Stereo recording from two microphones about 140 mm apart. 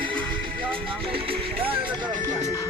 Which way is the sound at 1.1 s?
40° right (ahead or behind).